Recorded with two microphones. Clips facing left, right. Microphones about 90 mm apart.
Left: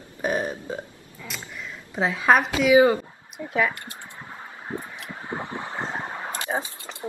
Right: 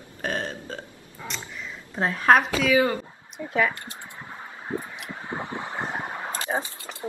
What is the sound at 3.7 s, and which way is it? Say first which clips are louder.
Speech: even; 25° right (ahead or behind).